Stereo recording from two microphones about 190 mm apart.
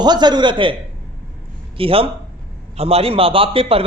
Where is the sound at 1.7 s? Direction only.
30° right (ahead or behind).